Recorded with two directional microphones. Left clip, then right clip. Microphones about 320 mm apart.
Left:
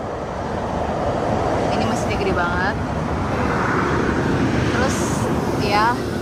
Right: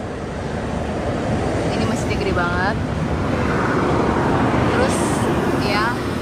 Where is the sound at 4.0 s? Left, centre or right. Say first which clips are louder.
Right 2 dB; centre.